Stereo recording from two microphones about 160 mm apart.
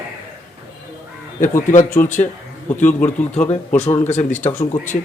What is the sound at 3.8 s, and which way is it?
Speech, 45° left (ahead or behind).